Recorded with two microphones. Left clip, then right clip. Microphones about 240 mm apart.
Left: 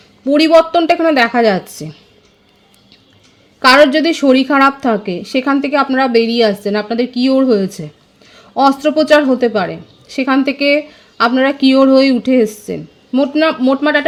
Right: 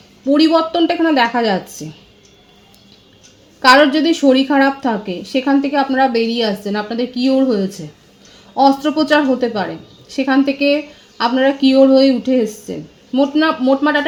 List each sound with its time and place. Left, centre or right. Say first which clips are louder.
0.3 s a woman's voice: left 4 dB; left
3.6 s a woman's voice: left 2 dB; left